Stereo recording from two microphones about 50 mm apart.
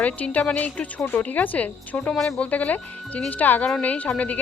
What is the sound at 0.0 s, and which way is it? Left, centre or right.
A woman's voice, left.